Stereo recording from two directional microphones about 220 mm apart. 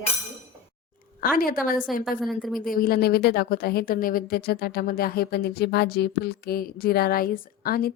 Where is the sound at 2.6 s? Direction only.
40° left (ahead or behind).